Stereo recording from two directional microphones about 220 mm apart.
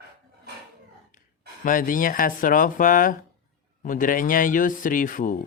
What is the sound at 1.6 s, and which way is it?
Speech, 40° left (ahead or behind).